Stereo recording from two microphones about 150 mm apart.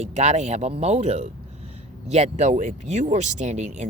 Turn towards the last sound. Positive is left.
turn(degrees=-45)  # may be behind; listen again after turning